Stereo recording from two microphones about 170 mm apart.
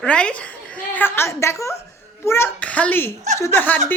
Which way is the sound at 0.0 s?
5° left (ahead or behind).